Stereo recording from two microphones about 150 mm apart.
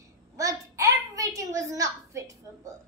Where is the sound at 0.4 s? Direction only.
20° right (ahead or behind).